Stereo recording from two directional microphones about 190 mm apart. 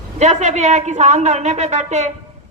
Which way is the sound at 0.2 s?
35° right (ahead or behind).